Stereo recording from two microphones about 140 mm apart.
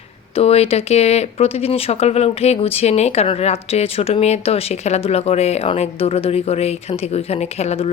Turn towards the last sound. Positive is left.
turn(degrees=50)  # may be behind; listen again after turning